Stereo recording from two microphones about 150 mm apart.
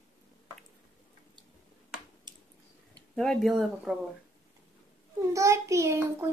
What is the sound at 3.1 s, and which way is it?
Speech, 5° left (ahead or behind).